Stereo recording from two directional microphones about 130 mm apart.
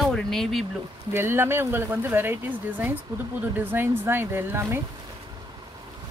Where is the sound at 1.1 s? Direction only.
20° right (ahead or behind).